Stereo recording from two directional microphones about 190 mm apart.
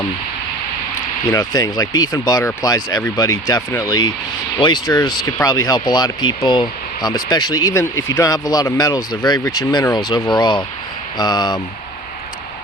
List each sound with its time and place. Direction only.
1.3 s speech: 20° left (ahead or behind)